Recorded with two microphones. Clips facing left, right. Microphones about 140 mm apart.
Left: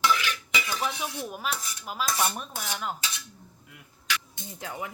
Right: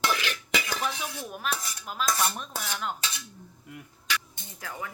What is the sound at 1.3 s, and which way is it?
Dishes, 5° left (ahead or behind).